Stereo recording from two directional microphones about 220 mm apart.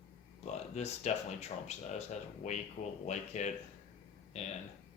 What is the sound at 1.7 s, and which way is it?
Speech, 30° left (ahead or behind).